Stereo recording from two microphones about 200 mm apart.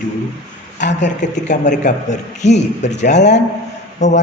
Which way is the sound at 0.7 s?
35° left (ahead or behind).